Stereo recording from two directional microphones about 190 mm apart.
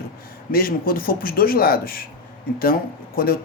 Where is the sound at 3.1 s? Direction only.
50° left (ahead or behind).